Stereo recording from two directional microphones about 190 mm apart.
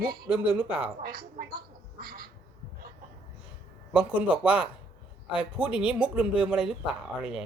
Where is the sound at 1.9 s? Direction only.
50° right (ahead or behind).